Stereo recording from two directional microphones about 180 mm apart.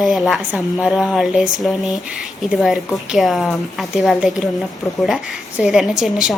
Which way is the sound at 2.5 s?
Centre (ahead or behind).